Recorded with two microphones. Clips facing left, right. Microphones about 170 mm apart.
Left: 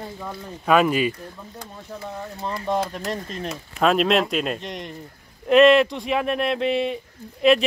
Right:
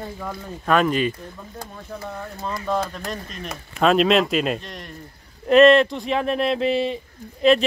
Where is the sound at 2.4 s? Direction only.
25° left (ahead or behind).